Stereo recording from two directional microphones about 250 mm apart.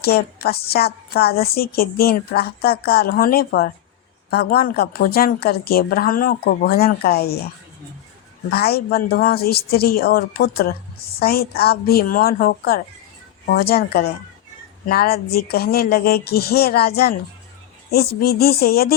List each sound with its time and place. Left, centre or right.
0.0 s a woman's voice: left
8.4 s a woman's voice: left